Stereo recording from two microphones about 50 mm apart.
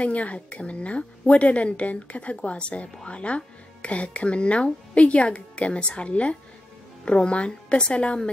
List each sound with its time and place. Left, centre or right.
0.0 s a woman's voice: left